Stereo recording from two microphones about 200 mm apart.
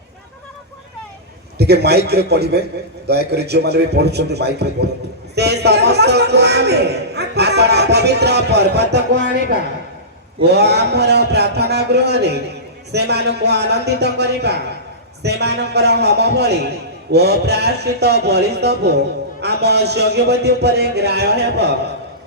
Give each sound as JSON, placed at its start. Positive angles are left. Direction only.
{"t": 1.5, "sound": "a man's voice", "side_deg": -55}